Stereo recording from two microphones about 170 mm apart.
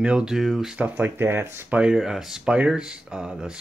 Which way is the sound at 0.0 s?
5° right (ahead or behind).